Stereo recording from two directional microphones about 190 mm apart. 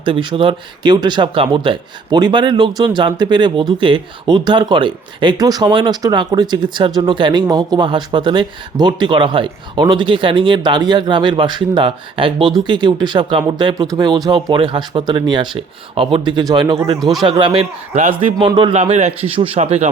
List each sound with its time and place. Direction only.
0.0 s speech: 25° right (ahead or behind)
17.0 s speech: centre (ahead or behind)
17.2 s speech: 25° right (ahead or behind)